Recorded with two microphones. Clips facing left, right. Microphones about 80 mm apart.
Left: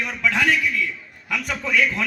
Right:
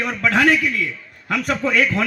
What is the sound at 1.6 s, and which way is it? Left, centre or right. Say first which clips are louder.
Speech: right 1 dB; right.